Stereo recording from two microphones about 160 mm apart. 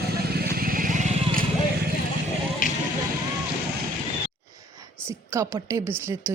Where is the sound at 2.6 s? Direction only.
55° left (ahead or behind).